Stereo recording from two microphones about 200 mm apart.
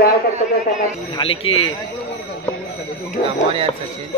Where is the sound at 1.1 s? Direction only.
25° left (ahead or behind).